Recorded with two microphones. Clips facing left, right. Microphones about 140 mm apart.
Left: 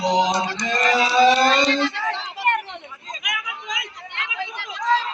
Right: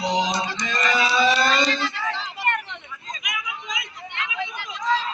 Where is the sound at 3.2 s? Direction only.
75° left (ahead or behind).